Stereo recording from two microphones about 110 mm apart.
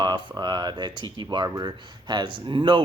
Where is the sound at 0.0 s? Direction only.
40° right (ahead or behind).